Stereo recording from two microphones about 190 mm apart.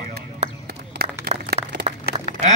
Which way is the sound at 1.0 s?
55° right (ahead or behind).